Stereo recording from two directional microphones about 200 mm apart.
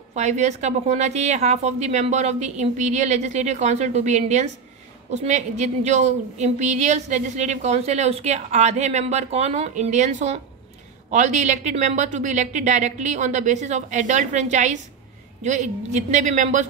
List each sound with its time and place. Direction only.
0.1 s a woman's voice: 35° right (ahead or behind)